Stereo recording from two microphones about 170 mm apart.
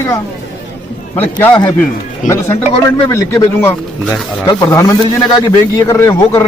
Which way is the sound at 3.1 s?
15° left (ahead or behind).